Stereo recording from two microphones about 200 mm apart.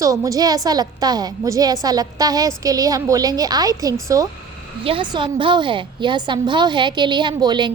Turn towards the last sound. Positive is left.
turn(degrees=-20)  # may be behind; listen again after turning